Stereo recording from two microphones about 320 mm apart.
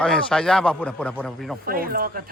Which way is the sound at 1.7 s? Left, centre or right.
Right.